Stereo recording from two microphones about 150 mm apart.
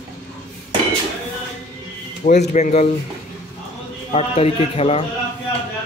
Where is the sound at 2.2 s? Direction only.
50° left (ahead or behind).